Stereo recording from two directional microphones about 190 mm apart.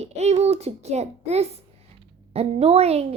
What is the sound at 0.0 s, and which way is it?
A woman's voice, 35° right (ahead or behind).